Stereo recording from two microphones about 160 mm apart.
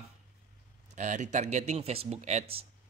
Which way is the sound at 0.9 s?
50° right (ahead or behind).